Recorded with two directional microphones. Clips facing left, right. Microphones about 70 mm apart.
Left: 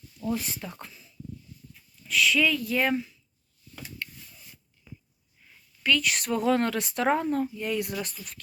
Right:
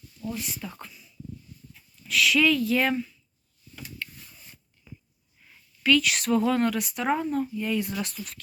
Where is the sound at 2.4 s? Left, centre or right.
Centre.